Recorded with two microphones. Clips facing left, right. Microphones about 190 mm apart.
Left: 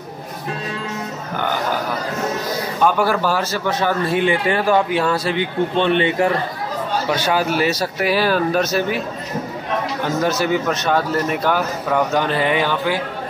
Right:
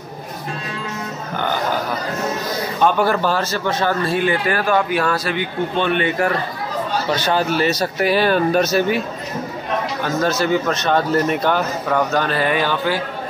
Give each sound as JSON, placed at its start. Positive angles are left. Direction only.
{"t": 2.8, "sound": "speech", "side_deg": 5}
{"t": 7.1, "sound": "speech", "side_deg": 10}
{"t": 10.0, "sound": "speech", "side_deg": 15}
{"t": 12.1, "sound": "speech", "side_deg": 20}